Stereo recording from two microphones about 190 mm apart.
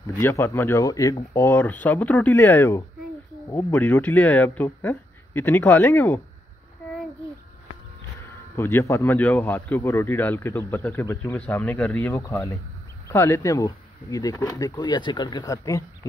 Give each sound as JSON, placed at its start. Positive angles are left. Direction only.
{"t": 0.0, "sound": "speech", "side_deg": 15}
{"t": 8.5, "sound": "speech", "side_deg": 15}